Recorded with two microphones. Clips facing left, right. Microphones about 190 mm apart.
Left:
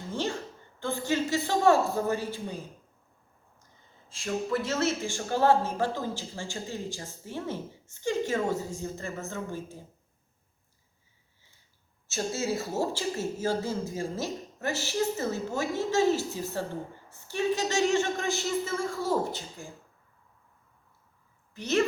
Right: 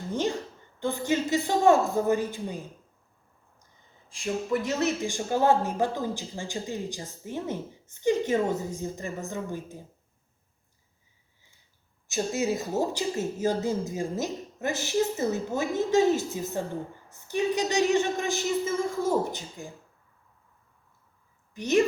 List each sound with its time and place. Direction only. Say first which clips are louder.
0.1 s a sound: right 4 dB; 15° right (ahead or behind)
0.8 s speech: right 2 dB; 20° right (ahead or behind)
4.1 s speech: right 2 dB; 15° right (ahead or behind)
12.0 s speech: right 3 dB; 15° right (ahead or behind)
21.5 s a woman's voice: right 3 dB; 15° right (ahead or behind)